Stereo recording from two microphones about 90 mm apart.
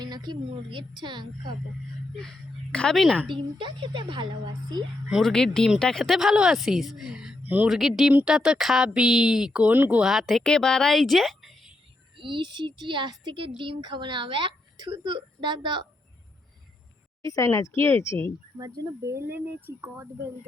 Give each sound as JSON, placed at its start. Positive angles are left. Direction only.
{"t": 0.0, "sound": "a woman's voice", "side_deg": -50}
{"t": 2.9, "sound": "a woman's voice", "side_deg": 0}
{"t": 3.2, "sound": "a woman's voice", "side_deg": -65}
{"t": 5.2, "sound": "a woman's voice", "side_deg": 5}
{"t": 7.4, "sound": "speech", "side_deg": -20}
{"t": 7.7, "sound": "a woman's voice", "side_deg": -5}
{"t": 10.0, "sound": "a woman's voice", "side_deg": -5}
{"t": 12.1, "sound": "a woman's voice", "side_deg": -65}
{"t": 17.2, "sound": "speech", "side_deg": 40}
{"t": 18.5, "sound": "a woman's voice", "side_deg": -45}
{"t": 19.1, "sound": "speech", "side_deg": -25}